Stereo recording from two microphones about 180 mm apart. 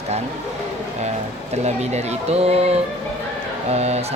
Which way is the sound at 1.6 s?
40° right (ahead or behind).